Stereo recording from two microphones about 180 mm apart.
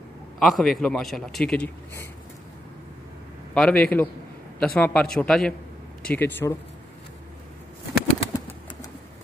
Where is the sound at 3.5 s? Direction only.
5° left (ahead or behind).